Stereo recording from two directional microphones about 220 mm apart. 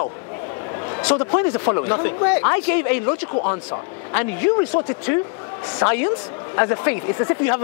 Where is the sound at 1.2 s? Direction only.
25° left (ahead or behind).